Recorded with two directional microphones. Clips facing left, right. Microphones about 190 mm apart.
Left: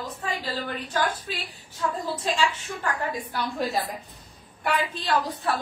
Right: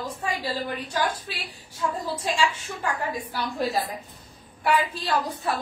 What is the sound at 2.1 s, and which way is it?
Speech, 10° right (ahead or behind).